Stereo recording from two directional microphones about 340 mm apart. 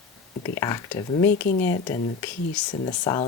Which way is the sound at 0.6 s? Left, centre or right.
Centre.